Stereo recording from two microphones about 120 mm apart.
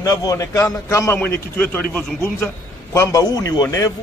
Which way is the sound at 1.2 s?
15° left (ahead or behind).